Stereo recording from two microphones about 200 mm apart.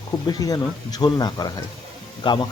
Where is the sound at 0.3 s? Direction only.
20° left (ahead or behind).